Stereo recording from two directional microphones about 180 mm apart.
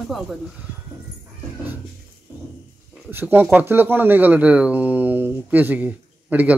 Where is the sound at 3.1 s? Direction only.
10° right (ahead or behind).